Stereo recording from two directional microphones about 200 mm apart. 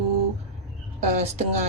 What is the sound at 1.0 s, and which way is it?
Speech, 35° right (ahead or behind).